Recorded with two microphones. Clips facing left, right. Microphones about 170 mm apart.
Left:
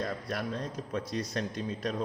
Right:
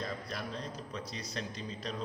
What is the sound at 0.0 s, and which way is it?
A man's voice, 55° left (ahead or behind).